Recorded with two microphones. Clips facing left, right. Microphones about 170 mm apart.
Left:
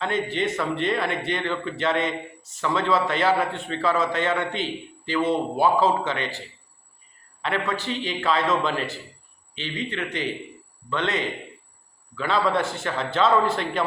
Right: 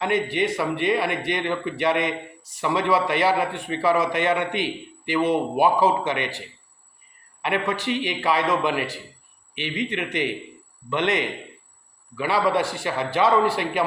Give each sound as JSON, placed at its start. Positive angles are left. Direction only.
{"t": 0.0, "sound": "a man's voice", "side_deg": -15}
{"t": 7.4, "sound": "a man's voice", "side_deg": -15}